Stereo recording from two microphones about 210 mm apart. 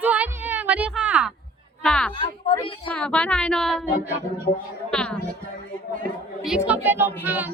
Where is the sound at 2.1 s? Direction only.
25° left (ahead or behind).